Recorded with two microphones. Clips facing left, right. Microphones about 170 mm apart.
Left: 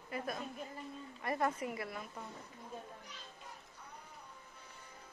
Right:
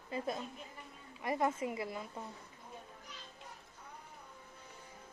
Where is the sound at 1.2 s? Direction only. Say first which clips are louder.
Right 2 dB; 15° right (ahead or behind).